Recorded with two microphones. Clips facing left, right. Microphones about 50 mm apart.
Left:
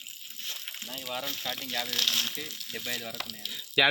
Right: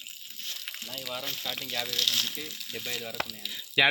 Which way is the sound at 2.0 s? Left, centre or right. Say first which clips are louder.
Even; left.